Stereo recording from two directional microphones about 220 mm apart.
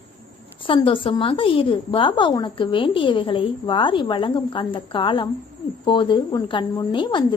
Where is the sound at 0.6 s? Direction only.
25° left (ahead or behind).